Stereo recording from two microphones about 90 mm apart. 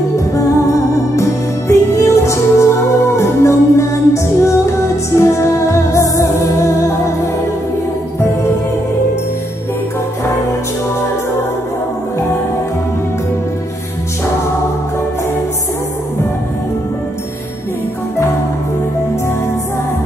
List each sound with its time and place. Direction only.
0.3 s music: 35° left (ahead or behind)